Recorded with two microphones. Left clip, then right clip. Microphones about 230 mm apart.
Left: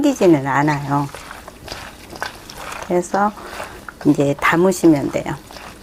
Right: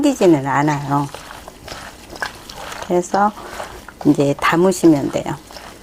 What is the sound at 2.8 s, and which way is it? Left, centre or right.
Speech, right.